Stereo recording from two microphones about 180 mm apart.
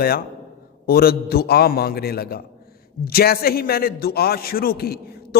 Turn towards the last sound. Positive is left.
turn(degrees=60)  # may be behind; listen again after turning